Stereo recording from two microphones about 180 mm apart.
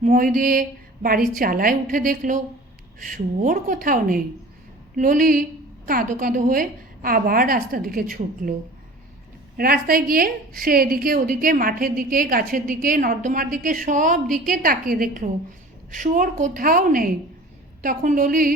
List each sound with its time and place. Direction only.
0.0 s a woman's voice: 50° right (ahead or behind)
9.6 s a woman's voice: 55° right (ahead or behind)